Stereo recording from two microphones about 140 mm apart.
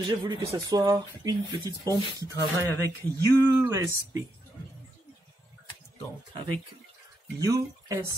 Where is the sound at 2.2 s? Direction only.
15° left (ahead or behind).